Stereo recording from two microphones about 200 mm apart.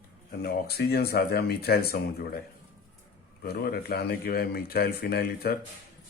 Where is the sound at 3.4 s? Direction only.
50° left (ahead or behind).